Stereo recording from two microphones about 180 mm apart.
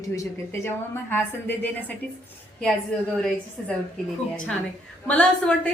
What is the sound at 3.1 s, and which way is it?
Speech, centre (ahead or behind).